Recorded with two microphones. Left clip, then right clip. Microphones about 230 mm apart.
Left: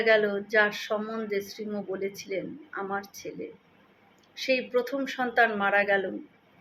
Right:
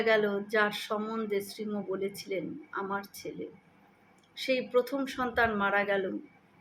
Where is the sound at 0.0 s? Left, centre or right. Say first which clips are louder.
Left 4 dB; centre.